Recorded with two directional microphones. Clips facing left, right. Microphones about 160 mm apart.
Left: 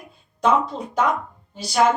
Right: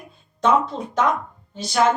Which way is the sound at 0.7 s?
30° right (ahead or behind).